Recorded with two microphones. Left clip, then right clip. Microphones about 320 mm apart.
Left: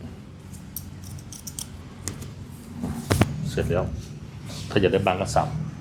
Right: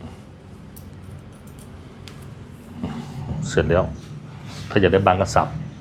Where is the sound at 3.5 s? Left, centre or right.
Right.